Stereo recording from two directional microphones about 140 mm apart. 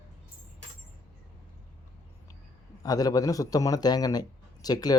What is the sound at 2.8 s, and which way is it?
A man's voice, 25° left (ahead or behind).